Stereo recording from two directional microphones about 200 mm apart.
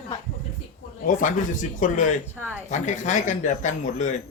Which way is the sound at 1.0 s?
40° left (ahead or behind).